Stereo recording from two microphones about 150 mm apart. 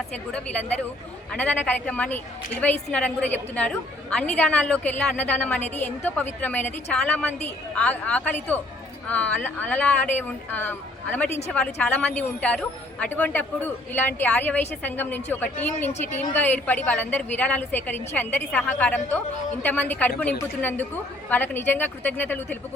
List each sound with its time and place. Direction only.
0.1 s a woman's voice: 5° left (ahead or behind)